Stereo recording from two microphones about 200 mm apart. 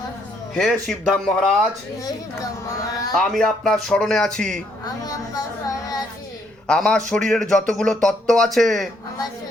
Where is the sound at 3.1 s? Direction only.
Centre (ahead or behind).